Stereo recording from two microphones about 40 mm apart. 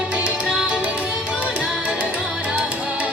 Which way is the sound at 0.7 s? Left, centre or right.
Right.